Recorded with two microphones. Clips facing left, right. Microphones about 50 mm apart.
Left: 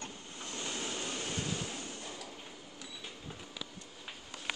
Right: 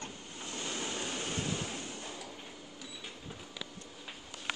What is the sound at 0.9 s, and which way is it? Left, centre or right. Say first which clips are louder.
Vehicle: right 1 dB; right.